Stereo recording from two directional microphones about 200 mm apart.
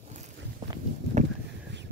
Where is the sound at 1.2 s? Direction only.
35° right (ahead or behind).